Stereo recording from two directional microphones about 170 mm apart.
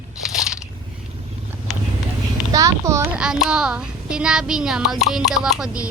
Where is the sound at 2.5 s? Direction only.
20° right (ahead or behind).